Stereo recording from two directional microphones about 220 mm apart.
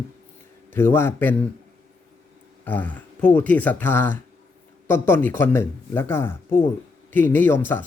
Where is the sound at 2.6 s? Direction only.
5° left (ahead or behind).